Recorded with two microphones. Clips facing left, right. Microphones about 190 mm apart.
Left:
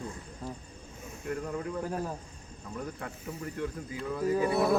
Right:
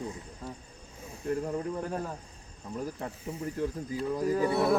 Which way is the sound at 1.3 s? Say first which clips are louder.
Right 3 dB; 30° right (ahead or behind).